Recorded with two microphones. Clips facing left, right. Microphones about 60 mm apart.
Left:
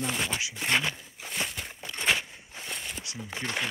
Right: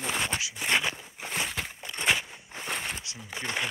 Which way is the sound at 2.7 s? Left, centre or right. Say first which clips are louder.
Right 5 dB; right.